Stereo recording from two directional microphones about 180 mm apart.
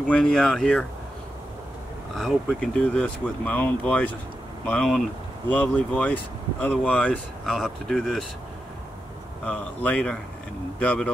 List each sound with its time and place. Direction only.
0.1 s speech: 5° left (ahead or behind)
2.1 s speech: 5° left (ahead or behind)
9.4 s speech: 5° left (ahead or behind)